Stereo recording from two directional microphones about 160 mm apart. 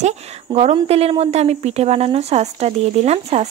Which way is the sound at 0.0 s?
45° right (ahead or behind).